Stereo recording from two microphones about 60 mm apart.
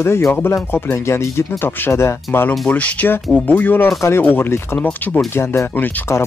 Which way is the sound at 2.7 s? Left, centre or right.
Left.